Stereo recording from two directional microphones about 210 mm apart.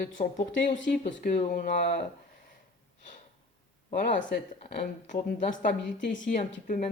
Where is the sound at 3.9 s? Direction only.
40° left (ahead or behind).